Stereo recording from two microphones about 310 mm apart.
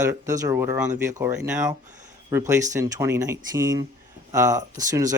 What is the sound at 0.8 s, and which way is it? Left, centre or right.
Speech, right.